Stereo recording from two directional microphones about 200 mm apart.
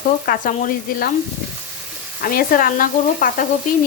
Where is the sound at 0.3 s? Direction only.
45° left (ahead or behind).